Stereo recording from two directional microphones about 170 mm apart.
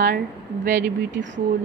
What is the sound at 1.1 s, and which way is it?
Speech, 90° right.